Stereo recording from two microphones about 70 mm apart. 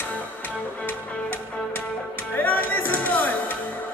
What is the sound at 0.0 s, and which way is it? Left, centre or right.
Music, left.